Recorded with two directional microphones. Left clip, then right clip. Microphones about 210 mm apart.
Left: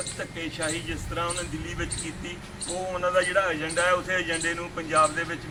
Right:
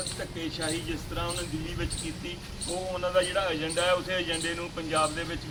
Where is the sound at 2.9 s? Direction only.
5° left (ahead or behind).